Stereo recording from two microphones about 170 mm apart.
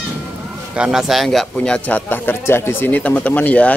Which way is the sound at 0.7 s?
5° right (ahead or behind).